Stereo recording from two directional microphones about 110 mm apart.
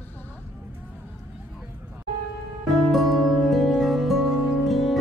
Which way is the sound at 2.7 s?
Centre (ahead or behind).